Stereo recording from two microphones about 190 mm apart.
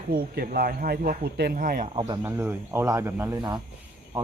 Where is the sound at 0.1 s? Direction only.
50° right (ahead or behind).